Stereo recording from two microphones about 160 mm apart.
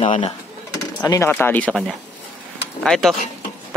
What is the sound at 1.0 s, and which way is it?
Speech, 20° left (ahead or behind).